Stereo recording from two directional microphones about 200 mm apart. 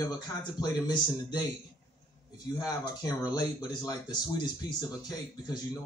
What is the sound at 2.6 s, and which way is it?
Speech, 20° left (ahead or behind).